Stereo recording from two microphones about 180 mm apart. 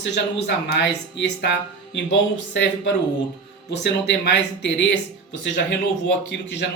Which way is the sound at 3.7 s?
70° left (ahead or behind).